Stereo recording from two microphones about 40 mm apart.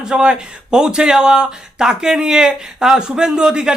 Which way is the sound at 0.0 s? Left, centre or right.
Centre.